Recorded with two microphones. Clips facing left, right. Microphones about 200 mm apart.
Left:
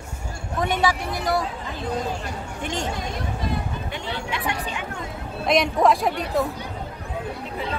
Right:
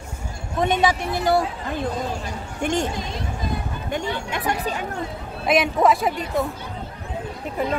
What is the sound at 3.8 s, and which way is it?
Speech, 45° right (ahead or behind).